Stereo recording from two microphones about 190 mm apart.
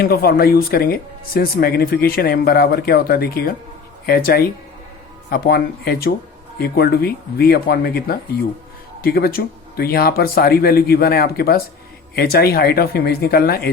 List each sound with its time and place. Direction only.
0.0 s speech: 55° left (ahead or behind)